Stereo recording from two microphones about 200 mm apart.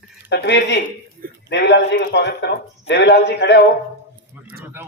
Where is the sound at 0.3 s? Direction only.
60° left (ahead or behind).